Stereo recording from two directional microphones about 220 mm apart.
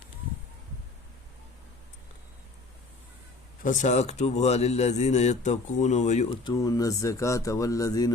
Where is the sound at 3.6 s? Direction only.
35° left (ahead or behind).